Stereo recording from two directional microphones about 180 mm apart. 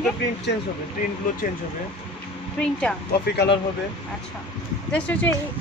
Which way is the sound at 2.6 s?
5° left (ahead or behind).